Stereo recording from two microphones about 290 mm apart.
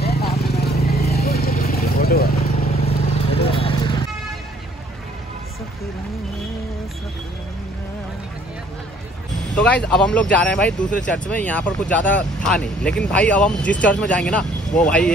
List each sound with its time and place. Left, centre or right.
0.0 s vehicle: left
3.3 s vehicle: centre
9.6 s speech: centre